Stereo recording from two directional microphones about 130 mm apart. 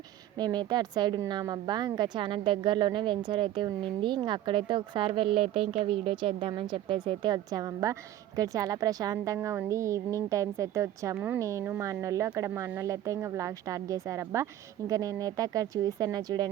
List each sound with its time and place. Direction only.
0.3 s a woman's voice: 35° right (ahead or behind)